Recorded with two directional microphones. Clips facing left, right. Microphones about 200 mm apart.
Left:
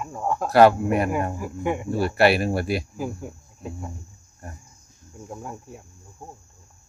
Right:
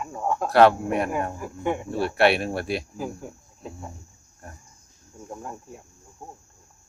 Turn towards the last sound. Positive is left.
turn(degrees=0)  # may be behind; listen again after turning